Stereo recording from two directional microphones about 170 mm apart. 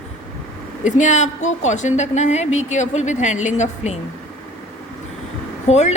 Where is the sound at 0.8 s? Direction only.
45° left (ahead or behind).